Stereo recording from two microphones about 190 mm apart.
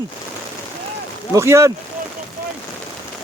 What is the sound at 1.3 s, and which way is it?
Speech, 15° right (ahead or behind).